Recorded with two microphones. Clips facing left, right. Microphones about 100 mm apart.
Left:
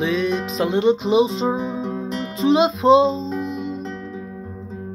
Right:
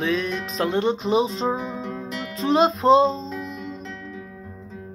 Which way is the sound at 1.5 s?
20° left (ahead or behind).